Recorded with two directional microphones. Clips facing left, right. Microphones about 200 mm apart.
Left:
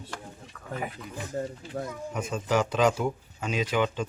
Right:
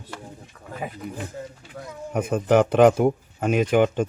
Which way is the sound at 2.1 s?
55° right (ahead or behind).